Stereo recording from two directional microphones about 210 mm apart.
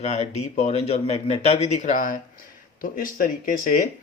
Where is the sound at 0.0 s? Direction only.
30° left (ahead or behind).